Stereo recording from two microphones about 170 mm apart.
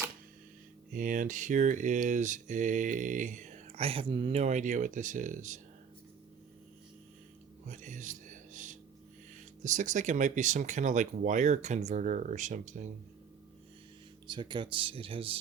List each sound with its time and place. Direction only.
0.9 s mantra: 50° right (ahead or behind)
7.7 s music: 45° right (ahead or behind)
9.6 s mantra: 45° right (ahead or behind)
14.3 s speech: 25° right (ahead or behind)